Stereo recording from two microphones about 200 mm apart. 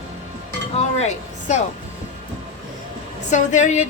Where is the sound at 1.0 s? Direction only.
35° left (ahead or behind).